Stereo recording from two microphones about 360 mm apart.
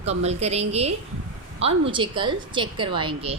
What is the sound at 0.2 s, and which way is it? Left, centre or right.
A woman's voice, centre.